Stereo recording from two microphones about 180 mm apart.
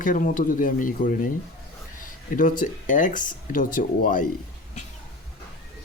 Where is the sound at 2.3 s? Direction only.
45° left (ahead or behind).